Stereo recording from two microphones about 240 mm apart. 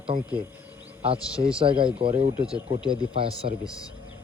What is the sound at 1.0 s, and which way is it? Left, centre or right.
Speech, right.